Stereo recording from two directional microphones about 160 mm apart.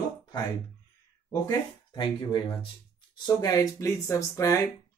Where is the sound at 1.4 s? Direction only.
25° left (ahead or behind).